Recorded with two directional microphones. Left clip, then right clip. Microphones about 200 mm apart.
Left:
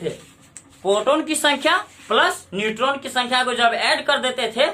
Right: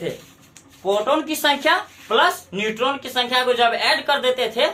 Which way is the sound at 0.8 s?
20° left (ahead or behind).